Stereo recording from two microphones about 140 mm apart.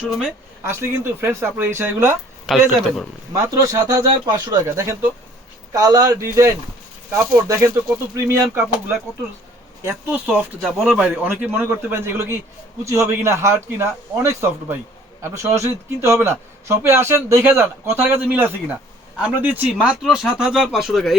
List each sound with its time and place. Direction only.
0.0 s speech: 5° right (ahead or behind)
0.6 s a man's voice: 20° right (ahead or behind)
2.5 s speech: centre (ahead or behind)
3.3 s speech: 25° right (ahead or behind)
9.8 s a man's voice: 10° right (ahead or behind)